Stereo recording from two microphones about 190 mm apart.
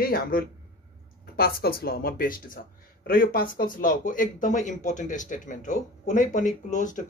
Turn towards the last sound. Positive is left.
turn(degrees=40)  # may be behind; listen again after turning